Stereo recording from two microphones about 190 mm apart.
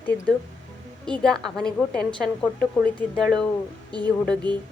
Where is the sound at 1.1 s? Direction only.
5° left (ahead or behind).